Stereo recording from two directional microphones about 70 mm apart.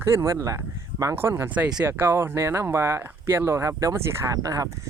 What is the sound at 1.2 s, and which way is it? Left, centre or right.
Speech, right.